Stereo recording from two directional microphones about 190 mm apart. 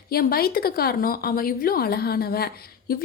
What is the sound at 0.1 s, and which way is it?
A woman's voice, 55° left (ahead or behind).